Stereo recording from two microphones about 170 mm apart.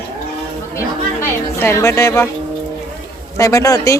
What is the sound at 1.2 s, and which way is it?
Speech, 15° left (ahead or behind).